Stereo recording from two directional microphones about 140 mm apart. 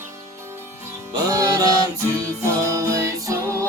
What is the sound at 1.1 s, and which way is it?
Music, 25° right (ahead or behind).